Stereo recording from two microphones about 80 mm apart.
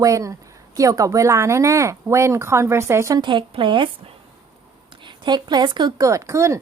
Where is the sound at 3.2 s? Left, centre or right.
Right.